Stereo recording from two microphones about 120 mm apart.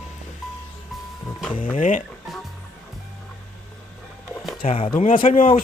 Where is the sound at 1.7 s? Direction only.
90° left.